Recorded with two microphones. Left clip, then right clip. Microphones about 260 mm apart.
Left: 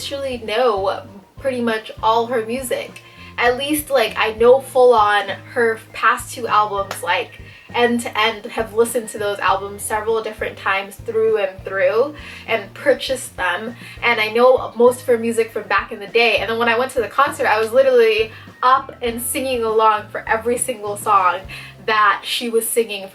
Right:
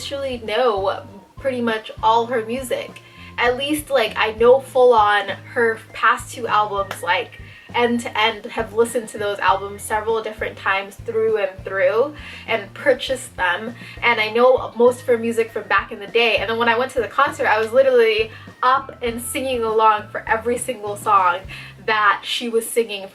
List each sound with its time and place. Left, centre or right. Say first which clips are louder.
0.0 s speech: left 1 dB; centre
4.5 s speech: left 1 dB; right
4.9 s speech: even; centre
14.5 s speech: left 2 dB; right
15.3 s speech: left 1 dB; centre